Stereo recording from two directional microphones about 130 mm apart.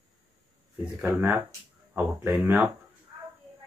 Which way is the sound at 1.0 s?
15° right (ahead or behind).